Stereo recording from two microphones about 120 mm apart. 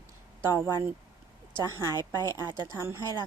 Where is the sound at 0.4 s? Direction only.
20° right (ahead or behind).